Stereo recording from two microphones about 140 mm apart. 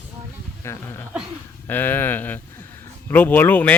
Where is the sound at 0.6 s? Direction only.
20° left (ahead or behind).